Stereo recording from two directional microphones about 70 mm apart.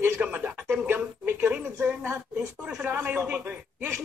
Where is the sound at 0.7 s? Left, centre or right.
Right.